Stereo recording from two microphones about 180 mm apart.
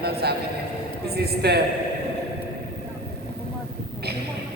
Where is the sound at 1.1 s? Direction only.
65° right (ahead or behind).